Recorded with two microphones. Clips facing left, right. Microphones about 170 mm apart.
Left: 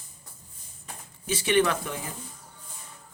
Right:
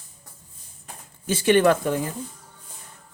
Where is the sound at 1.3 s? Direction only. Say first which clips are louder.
Right 6 dB; 50° right (ahead or behind).